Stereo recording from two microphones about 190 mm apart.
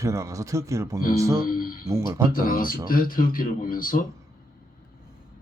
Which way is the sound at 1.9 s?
15° right (ahead or behind).